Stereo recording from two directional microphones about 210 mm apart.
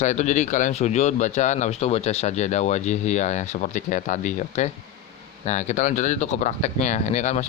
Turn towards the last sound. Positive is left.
turn(degrees=35)  # may be behind; listen again after turning